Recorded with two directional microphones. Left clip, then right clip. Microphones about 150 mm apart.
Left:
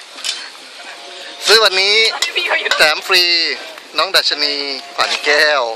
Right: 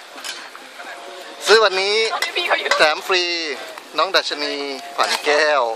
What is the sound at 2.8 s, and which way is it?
Speech, centre (ahead or behind).